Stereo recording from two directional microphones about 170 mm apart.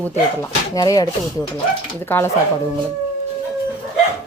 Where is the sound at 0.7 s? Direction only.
20° left (ahead or behind).